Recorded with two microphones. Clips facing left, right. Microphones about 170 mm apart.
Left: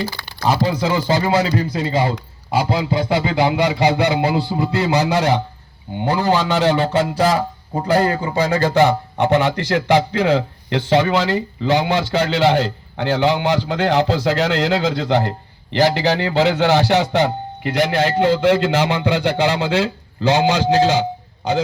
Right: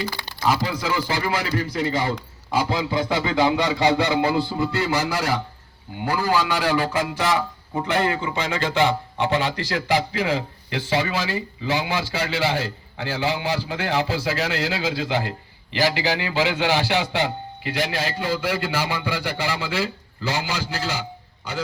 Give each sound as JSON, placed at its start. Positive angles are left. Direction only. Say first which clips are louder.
{"t": 0.4, "sound": "speech", "louder": "left 5 dB", "side_deg": 30}
{"t": 4.4, "sound": "a man's voice", "louder": "left 3 dB", "side_deg": 65}
{"t": 4.8, "sound": "a man's voice", "louder": "left 9 dB", "side_deg": 20}
{"t": 9.1, "sound": "a man's voice", "louder": "left 6 dB", "side_deg": 60}